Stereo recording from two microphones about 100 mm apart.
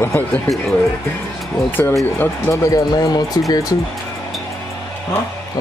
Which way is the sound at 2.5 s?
35° left (ahead or behind).